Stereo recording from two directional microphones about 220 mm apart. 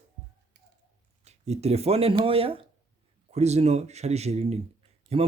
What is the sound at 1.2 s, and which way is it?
Speech, 30° right (ahead or behind).